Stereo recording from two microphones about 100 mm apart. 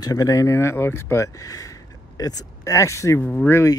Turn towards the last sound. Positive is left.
turn(degrees=25)  # may be behind; listen again after turning